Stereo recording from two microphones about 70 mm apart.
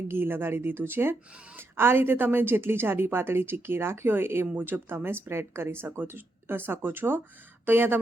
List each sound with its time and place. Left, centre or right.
0.1 s a woman's voice: right